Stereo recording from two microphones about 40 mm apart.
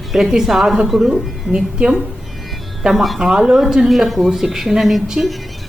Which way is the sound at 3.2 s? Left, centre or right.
Centre.